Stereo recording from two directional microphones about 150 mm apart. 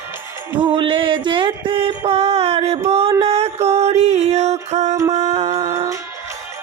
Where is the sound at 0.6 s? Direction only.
35° right (ahead or behind); by 4.9 s 50° right (ahead or behind).